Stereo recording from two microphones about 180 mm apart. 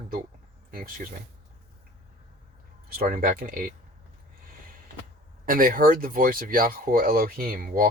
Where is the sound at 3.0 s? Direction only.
55° right (ahead or behind).